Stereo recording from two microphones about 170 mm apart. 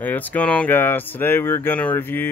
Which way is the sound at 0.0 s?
10° left (ahead or behind).